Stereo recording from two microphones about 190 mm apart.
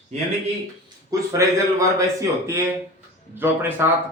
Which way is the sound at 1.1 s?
15° right (ahead or behind).